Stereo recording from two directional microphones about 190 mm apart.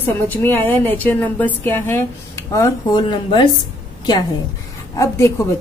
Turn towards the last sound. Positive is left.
turn(degrees=15)  # may be behind; listen again after turning